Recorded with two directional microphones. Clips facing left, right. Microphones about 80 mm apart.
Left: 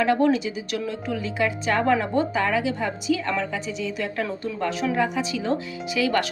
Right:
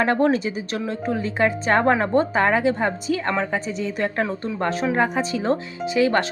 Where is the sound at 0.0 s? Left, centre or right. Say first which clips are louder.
Right 1 dB; right.